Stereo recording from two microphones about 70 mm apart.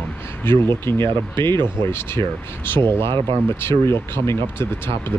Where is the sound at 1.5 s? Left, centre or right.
Right.